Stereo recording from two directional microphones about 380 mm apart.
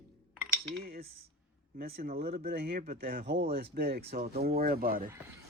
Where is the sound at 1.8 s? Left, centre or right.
Centre.